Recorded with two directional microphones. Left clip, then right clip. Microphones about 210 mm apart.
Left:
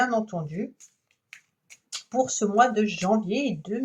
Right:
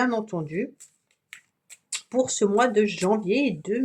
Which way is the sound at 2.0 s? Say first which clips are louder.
Right 2 dB; 45° right (ahead or behind).